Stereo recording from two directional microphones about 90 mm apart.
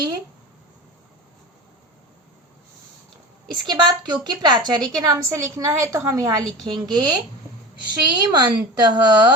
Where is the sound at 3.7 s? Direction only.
55° right (ahead or behind); by 6.4 s 35° right (ahead or behind).